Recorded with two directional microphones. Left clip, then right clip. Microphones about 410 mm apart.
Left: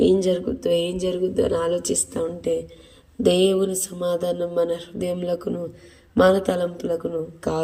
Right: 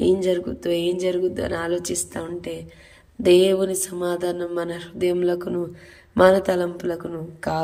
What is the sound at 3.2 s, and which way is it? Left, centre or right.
Speech, centre.